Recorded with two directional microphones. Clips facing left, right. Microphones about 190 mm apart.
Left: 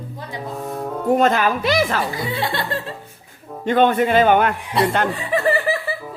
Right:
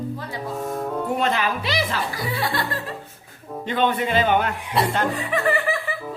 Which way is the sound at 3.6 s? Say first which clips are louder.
Left 6 dB; 50° left (ahead or behind).